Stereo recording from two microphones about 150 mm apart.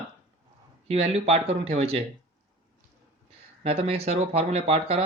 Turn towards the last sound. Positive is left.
turn(degrees=-45)  # may be behind; listen again after turning